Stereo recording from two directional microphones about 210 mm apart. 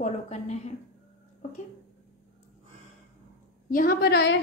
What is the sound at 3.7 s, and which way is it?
Speech, 40° left (ahead or behind).